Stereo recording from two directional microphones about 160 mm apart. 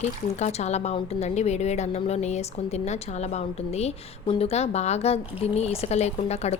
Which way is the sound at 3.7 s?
40° left (ahead or behind).